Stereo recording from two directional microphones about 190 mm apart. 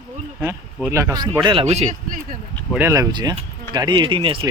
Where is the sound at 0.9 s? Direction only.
15° right (ahead or behind); by 2.2 s 35° right (ahead or behind).